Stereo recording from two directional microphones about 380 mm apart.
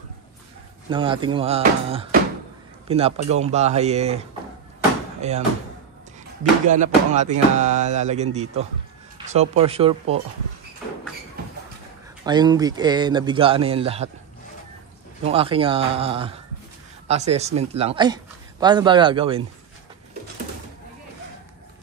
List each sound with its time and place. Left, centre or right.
0.8 s speech: centre
5.2 s speech: centre
6.7 s music: centre
9.2 s speech: centre
12.3 s speech: centre
15.2 s speech: centre